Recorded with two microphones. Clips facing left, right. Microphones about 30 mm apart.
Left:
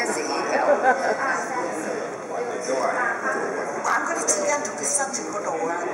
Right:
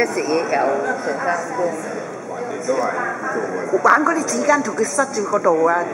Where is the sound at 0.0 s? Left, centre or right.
Centre.